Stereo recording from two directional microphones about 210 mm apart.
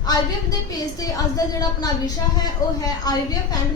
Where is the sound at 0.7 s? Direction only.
15° left (ahead or behind).